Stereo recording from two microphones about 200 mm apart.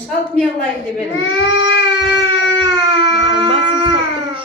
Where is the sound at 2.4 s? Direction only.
65° left (ahead or behind).